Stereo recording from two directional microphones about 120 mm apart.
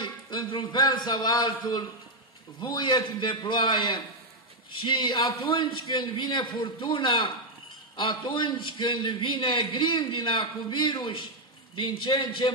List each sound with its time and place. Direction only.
0.0 s a man's voice: 40° left (ahead or behind)